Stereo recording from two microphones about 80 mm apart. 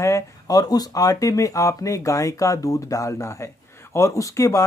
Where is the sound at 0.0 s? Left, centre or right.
Left.